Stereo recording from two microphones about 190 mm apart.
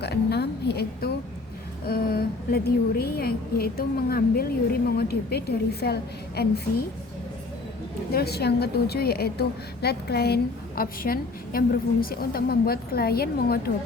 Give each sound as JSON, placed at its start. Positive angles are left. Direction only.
{"t": 0.0, "sound": "a sound", "side_deg": 60}
{"t": 1.9, "sound": "a woman's voice", "side_deg": 55}
{"t": 8.1, "sound": "a woman's voice", "side_deg": 55}